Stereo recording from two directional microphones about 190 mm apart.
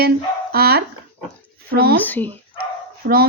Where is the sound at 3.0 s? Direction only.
60° right (ahead or behind).